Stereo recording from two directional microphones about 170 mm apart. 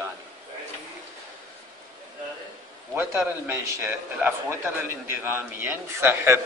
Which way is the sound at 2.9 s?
15° right (ahead or behind).